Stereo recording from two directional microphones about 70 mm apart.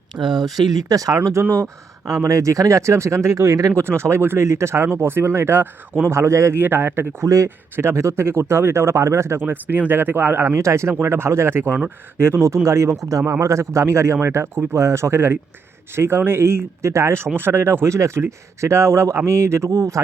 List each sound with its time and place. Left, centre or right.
0.2 s speech: right
0.5 s speech: right
3.8 s speech: right
6.6 s speech: right
7.2 s speech: right
7.8 s speech: right
10.4 s speech: right
12.6 s speech: right
17.3 s speech: right